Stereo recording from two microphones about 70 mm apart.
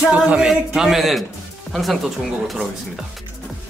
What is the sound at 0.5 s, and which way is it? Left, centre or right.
Speech, centre.